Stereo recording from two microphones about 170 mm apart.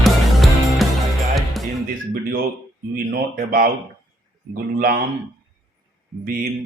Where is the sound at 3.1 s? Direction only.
55° right (ahead or behind).